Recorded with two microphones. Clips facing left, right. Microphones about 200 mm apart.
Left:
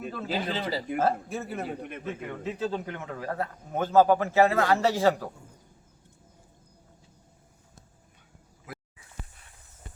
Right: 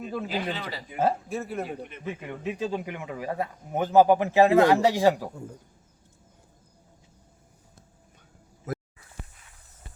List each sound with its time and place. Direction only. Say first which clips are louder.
0.1 s a man's voice: right 2 dB; 15° right (ahead or behind)
0.6 s speech: left 6 dB; 30° left (ahead or behind)
1.3 s a man's voice: right 2 dB; centre (ahead or behind)
2.0 s a man's voice: right 2 dB; 15° right (ahead or behind)
8.7 s a sound: right 11 dB; 45° right (ahead or behind)